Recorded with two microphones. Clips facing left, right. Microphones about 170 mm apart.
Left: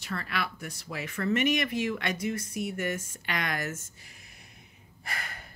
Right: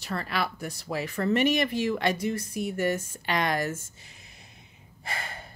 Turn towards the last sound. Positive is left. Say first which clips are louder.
# right 3 dB
turn(degrees=-25)  # may be behind; listen again after turning